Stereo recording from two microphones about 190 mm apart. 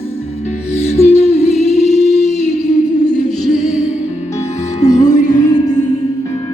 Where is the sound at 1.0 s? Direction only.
35° left (ahead or behind).